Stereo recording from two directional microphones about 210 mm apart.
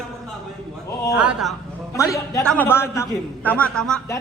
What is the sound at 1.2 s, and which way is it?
Speech, 5° right (ahead or behind).